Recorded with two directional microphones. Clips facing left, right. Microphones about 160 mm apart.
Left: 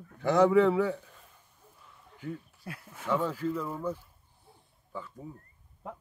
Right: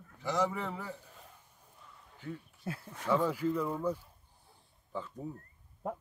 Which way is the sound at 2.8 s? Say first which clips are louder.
Left 3 dB; 5° left (ahead or behind).